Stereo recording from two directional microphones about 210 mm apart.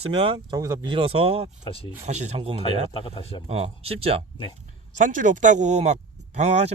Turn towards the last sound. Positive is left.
turn(degrees=-30)  # may be behind; listen again after turning